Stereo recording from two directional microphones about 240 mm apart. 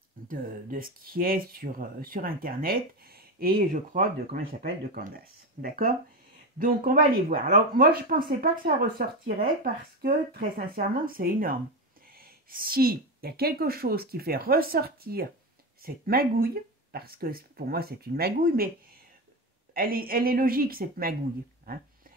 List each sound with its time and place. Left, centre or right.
0.3 s speech: right
19.7 s speech: right